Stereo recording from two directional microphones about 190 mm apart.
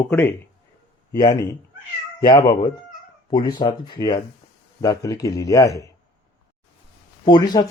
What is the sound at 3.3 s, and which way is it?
Speech, 20° left (ahead or behind).